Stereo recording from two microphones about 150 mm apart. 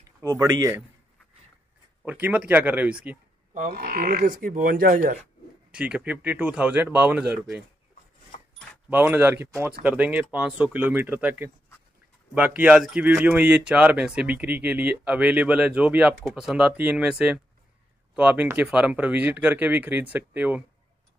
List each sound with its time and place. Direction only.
0.2 s speech: 20° right (ahead or behind)
2.0 s speech: 10° right (ahead or behind)
3.7 s speech: 90° right; by 5.0 s 70° right (ahead or behind)
5.7 s speech: 5° right (ahead or behind)
8.9 s speech: 10° right (ahead or behind)